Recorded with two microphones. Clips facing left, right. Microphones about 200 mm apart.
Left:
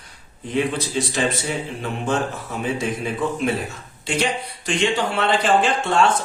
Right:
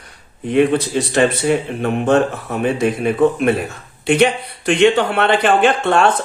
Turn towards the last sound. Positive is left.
turn(degrees=-60)  # may be behind; listen again after turning